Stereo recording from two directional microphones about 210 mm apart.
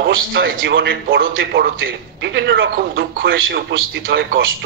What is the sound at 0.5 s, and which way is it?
Speech, 60° right (ahead or behind).